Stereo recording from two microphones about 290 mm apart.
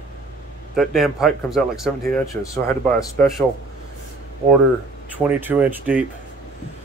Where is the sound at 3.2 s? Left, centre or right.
Centre.